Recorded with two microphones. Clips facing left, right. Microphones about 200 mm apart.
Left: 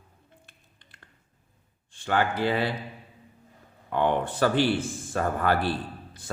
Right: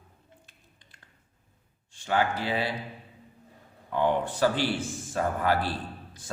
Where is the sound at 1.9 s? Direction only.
55° left (ahead or behind).